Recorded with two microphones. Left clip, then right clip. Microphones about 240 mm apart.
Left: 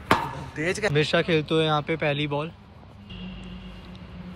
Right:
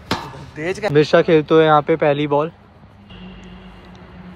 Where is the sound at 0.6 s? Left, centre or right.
Right.